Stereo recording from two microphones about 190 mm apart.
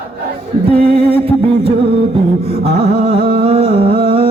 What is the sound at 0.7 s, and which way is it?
Music, 30° right (ahead or behind).